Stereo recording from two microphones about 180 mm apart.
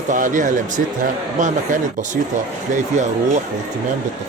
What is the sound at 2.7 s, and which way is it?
Speech, 40° right (ahead or behind).